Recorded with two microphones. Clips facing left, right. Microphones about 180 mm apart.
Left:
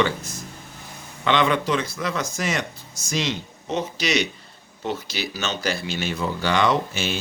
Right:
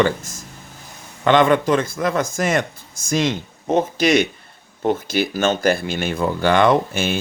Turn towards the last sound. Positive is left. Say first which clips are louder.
# right 5 dB
turn(degrees=-50)  # may be behind; listen again after turning